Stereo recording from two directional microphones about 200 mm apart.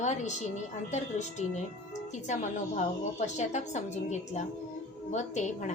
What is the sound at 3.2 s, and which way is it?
A woman's voice, 35° left (ahead or behind).